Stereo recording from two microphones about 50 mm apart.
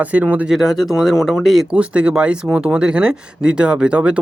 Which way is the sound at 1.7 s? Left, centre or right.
Right.